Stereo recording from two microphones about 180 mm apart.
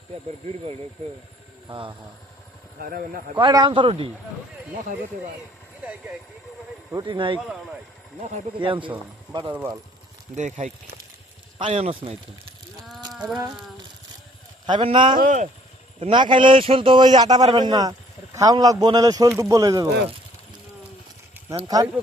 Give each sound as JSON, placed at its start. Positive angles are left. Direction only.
{"t": 1.6, "sound": "speech", "side_deg": -25}
{"t": 3.3, "sound": "a man's voice", "side_deg": -25}
{"t": 6.9, "sound": "a man's voice", "side_deg": -25}
{"t": 8.5, "sound": "a man's voice", "side_deg": -30}
{"t": 9.5, "sound": "speech", "side_deg": -10}
{"t": 10.3, "sound": "speech", "side_deg": -40}
{"t": 11.5, "sound": "speech", "side_deg": -30}
{"t": 13.1, "sound": "a sound", "side_deg": -5}
{"t": 14.7, "sound": "a man's voice", "side_deg": -25}
{"t": 15.2, "sound": "speech", "side_deg": -45}
{"t": 16.0, "sound": "a man's voice", "side_deg": -25}